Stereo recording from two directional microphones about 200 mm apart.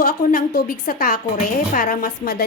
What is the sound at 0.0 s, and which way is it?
A woman's voice, 45° left (ahead or behind).